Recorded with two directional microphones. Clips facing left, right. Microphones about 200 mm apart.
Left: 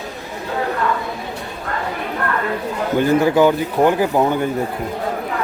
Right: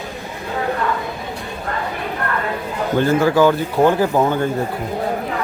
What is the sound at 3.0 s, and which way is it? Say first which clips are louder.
Speech: left 1 dB; 15° left (ahead or behind).